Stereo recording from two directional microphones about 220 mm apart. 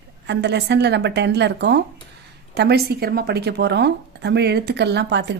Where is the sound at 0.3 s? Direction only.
50° right (ahead or behind).